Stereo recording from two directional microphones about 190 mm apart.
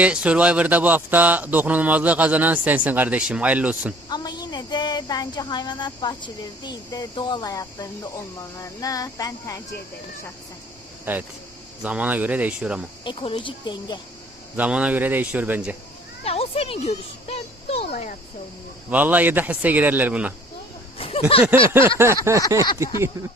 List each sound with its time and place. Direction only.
0.0 s speech: 5° right (ahead or behind)
4.1 s a woman's voice: 20° left (ahead or behind)
11.1 s speech: 10° right (ahead or behind)
13.1 s a woman's voice: 25° left (ahead or behind)
14.5 s speech: 5° right (ahead or behind)
16.2 s children playing: 30° left (ahead or behind)
17.2 s music: 30° left (ahead or behind)
18.9 s speech: 10° right (ahead or behind)
21.0 s a sound: 30° left (ahead or behind)
21.7 s speech: 10° right (ahead or behind)